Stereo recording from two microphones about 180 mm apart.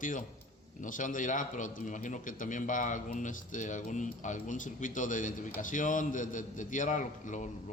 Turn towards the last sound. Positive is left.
turn(degrees=45)  # may be behind; listen again after turning